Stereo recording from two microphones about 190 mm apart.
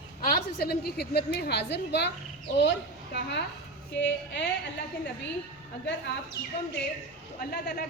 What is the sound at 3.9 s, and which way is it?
Speech, 70° left (ahead or behind).